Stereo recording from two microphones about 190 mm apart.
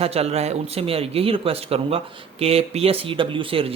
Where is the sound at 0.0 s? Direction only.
35° right (ahead or behind).